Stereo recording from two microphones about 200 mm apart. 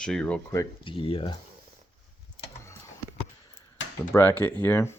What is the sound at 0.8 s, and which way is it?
Speech, 25° left (ahead or behind).